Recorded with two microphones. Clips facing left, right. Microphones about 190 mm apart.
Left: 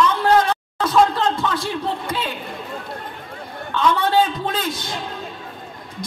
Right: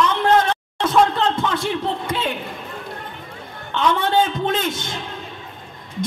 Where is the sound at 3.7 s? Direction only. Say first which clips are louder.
Left 1 dB; 25° right (ahead or behind).